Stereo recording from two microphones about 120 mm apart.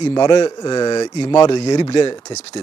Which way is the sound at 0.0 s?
40° left (ahead or behind).